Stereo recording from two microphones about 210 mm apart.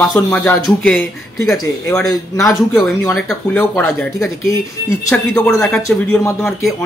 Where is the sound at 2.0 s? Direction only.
15° left (ahead or behind).